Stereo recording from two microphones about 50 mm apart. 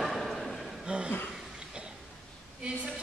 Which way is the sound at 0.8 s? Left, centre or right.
Centre.